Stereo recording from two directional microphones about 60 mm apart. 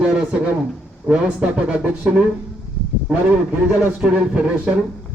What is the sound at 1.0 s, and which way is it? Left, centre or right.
Speech, centre.